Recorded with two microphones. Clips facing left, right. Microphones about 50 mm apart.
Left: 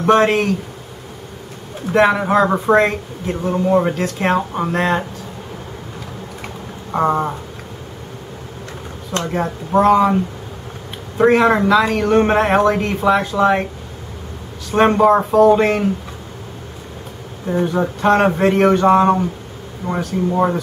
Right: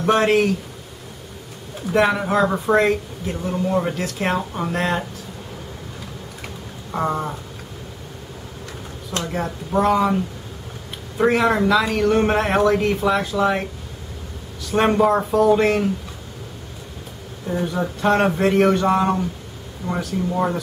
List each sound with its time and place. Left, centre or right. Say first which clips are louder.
0.0 s speech: left 3 dB; centre
1.9 s speech: left 4 dB; centre
6.9 s a sound: left 6 dB; centre
9.1 s speech: left 4 dB; centre
14.7 s speech: left 4 dB; centre
17.5 s speech: left 5 dB; centre